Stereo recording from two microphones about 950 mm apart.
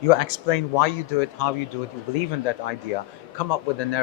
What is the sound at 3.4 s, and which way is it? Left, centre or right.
Speech, left.